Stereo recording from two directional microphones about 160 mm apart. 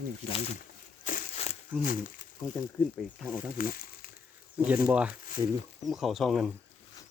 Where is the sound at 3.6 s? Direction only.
65° left (ahead or behind).